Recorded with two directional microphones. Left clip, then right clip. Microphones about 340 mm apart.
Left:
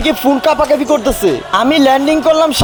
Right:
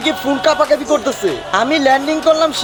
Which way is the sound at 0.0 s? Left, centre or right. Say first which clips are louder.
Left 3 dB; centre.